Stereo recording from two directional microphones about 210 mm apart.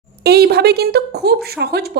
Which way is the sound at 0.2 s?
50° right (ahead or behind).